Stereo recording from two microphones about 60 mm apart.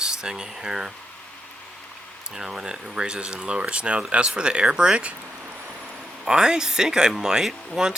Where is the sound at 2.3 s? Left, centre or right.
Centre.